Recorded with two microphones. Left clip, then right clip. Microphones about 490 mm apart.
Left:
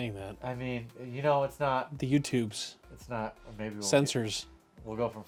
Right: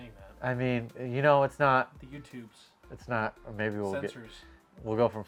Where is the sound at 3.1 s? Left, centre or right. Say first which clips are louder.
Right 5 dB; right.